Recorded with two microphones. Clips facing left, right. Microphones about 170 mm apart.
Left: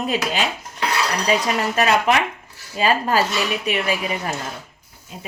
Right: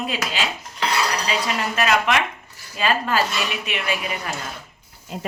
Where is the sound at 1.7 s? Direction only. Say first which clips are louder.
Left 2 dB; 35° left (ahead or behind).